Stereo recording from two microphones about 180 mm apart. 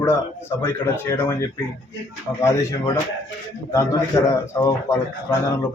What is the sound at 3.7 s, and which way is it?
Speech, 15° left (ahead or behind).